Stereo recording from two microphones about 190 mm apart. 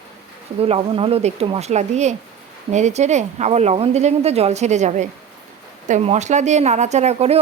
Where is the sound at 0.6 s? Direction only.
30° right (ahead or behind).